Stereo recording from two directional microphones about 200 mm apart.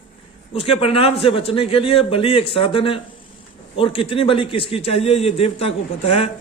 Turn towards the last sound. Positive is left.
turn(degrees=30)  # may be behind; listen again after turning